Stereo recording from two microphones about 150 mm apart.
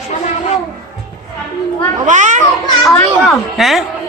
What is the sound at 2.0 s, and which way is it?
Children playing, 55° right (ahead or behind).